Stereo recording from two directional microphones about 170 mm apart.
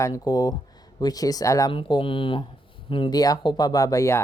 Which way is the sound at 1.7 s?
30° left (ahead or behind).